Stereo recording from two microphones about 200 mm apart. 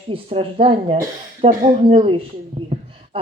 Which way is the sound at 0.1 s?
30° right (ahead or behind).